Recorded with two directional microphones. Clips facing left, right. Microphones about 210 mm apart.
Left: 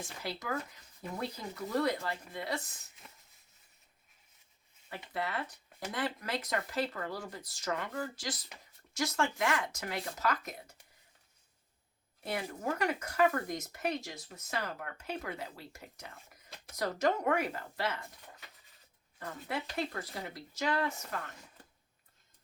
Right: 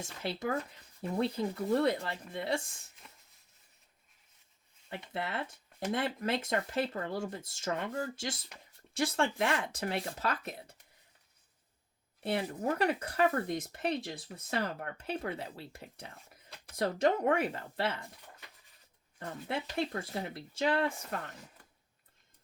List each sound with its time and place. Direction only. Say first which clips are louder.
0.0 s speech: right 5 dB; 25° right (ahead or behind)
4.9 s speech: even; 25° right (ahead or behind)
12.2 s speech: right 4 dB; 30° right (ahead or behind)
19.2 s speech: right 2 dB; 25° right (ahead or behind)